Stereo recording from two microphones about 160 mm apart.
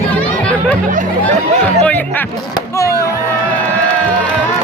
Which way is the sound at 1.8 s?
10° left (ahead or behind).